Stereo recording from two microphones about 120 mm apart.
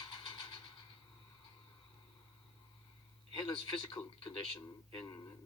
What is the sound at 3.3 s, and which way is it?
A man's voice, 40° left (ahead or behind).